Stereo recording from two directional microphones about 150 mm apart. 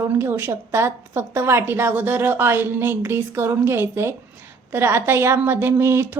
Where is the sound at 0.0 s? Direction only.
15° right (ahead or behind).